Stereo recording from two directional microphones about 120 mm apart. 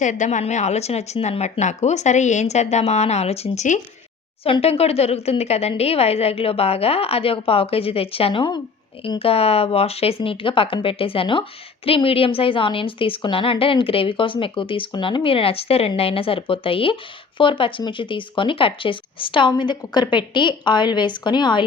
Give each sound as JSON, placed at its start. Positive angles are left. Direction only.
{"t": 0.0, "sound": "speech", "side_deg": 90}
{"t": 4.4, "sound": "speech", "side_deg": 55}
{"t": 9.0, "sound": "speech", "side_deg": 50}